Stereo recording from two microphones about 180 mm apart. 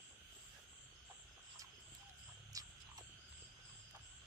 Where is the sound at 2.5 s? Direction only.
20° right (ahead or behind).